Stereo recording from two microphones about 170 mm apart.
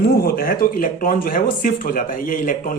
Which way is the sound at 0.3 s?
60° left (ahead or behind).